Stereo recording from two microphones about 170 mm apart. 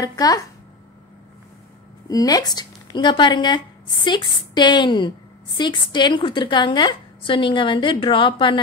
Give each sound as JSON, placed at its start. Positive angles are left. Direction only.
{"t": 0.0, "sound": "speech", "side_deg": 20}
{"t": 2.0, "sound": "speech", "side_deg": 20}